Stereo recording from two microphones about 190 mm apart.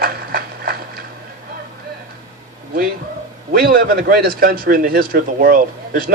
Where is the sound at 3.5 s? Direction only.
50° right (ahead or behind).